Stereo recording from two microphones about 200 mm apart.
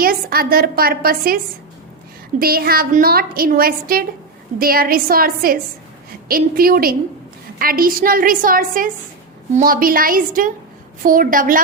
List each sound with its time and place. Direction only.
0.0 s a woman's voice: 50° right (ahead or behind)
2.4 s a woman's voice: 50° right (ahead or behind)